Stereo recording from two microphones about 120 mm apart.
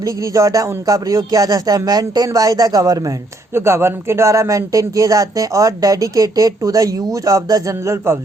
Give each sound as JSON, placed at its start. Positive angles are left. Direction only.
{"t": 0.0, "sound": "speech", "side_deg": -30}
{"t": 3.5, "sound": "speech", "side_deg": -20}